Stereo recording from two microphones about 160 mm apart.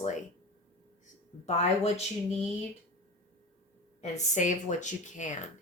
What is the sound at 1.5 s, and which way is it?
Speech, 40° left (ahead or behind).